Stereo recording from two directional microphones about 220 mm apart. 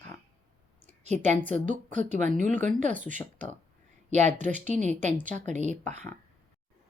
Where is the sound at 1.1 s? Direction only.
30° right (ahead or behind).